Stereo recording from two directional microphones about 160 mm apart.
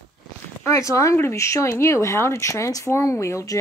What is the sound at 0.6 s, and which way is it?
Speech, 20° left (ahead or behind).